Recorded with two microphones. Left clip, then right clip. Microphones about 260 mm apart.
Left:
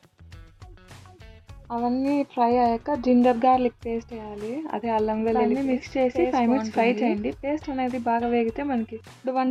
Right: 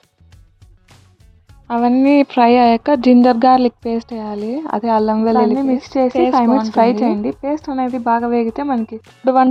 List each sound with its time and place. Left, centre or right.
1.7 s speech: right
9.2 s speech: right